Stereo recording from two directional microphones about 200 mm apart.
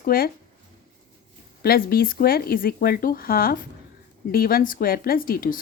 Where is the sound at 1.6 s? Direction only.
50° left (ahead or behind).